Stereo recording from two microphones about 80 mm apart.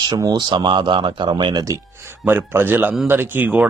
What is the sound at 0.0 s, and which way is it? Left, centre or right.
Speech, right.